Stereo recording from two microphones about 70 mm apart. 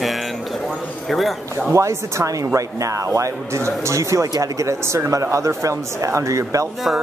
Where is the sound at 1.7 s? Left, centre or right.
Right.